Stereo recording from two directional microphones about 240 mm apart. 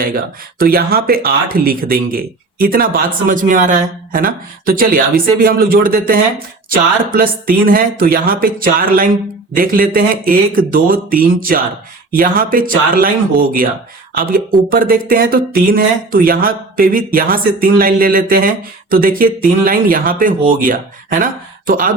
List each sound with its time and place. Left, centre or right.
0.6 s speech: right